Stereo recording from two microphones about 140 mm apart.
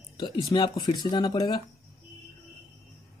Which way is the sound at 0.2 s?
30° left (ahead or behind).